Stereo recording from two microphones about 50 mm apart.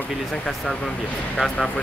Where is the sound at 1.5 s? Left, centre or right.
Left.